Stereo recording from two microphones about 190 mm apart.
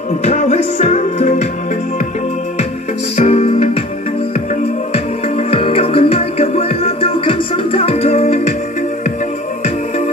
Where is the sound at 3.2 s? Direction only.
35° left (ahead or behind).